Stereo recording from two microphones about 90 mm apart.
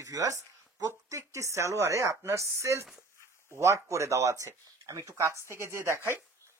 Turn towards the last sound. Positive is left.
turn(degrees=-30)  # may be behind; listen again after turning